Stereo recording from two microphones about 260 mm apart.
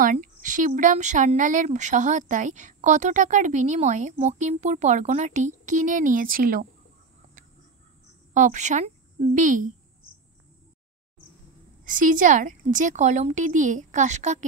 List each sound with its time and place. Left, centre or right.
0.0 s speech: right
8.3 s a woman's voice: right
11.8 s speech: right